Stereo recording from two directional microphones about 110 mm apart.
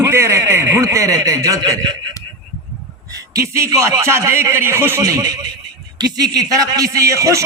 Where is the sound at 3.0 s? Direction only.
30° right (ahead or behind).